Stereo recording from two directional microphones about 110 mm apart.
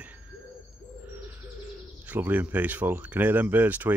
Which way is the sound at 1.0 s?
15° right (ahead or behind).